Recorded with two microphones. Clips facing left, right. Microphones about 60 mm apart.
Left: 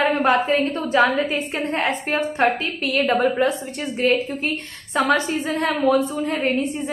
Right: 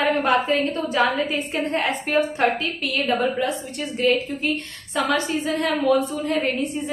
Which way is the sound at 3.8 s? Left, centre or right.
Left.